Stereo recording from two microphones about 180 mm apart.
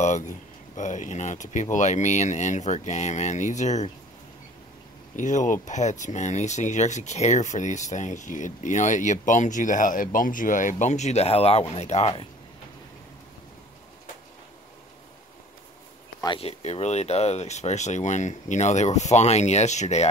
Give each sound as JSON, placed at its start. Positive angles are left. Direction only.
{"t": 0.0, "sound": "speech", "side_deg": 40}
{"t": 5.1, "sound": "speech", "side_deg": 45}
{"t": 16.3, "sound": "speech", "side_deg": 35}